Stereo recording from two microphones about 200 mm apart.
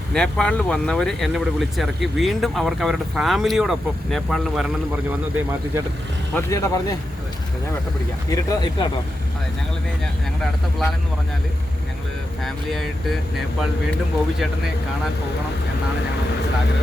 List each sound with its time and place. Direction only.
0.1 s speech: 5° left (ahead or behind)
6.3 s speech: 15° left (ahead or behind)
8.3 s speech: 20° left (ahead or behind)
10.4 s speech: centre (ahead or behind)
12.4 s speech: centre (ahead or behind)